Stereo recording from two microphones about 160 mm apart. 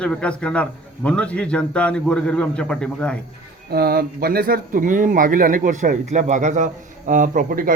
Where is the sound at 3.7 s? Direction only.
75° right (ahead or behind).